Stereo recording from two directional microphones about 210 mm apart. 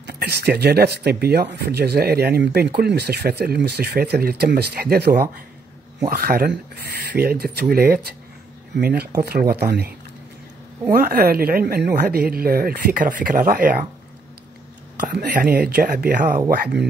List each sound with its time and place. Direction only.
0.0 s a woman's voice: 50° right (ahead or behind)
15.7 s a woman's voice: 45° right (ahead or behind)